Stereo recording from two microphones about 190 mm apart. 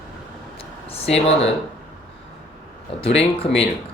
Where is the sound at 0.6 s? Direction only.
30° left (ahead or behind).